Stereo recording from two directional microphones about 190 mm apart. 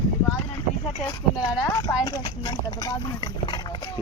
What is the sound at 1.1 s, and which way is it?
Speech, 20° left (ahead or behind).